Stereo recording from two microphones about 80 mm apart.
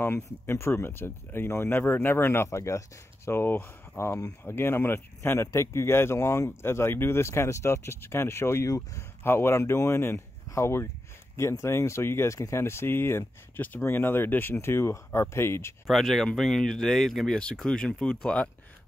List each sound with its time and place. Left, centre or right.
0.0 s speech: left
3.3 s speech: left
15.9 s speech: centre